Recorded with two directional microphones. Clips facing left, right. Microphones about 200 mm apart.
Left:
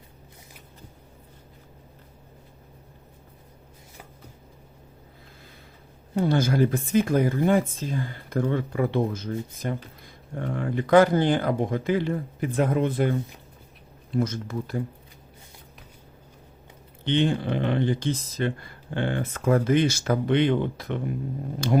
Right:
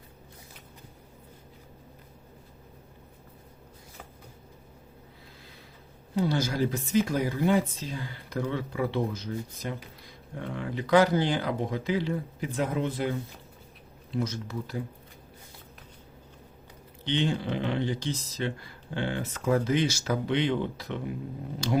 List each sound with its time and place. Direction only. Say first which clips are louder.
6.1 s speech: left 5 dB; 55° left (ahead or behind)
17.0 s speech: left 5 dB; 55° left (ahead or behind)